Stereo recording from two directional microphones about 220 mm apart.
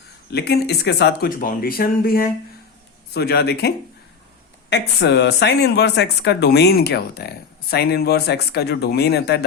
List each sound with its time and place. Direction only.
0.3 s speech: 50° left (ahead or behind)
4.7 s speech: 50° left (ahead or behind)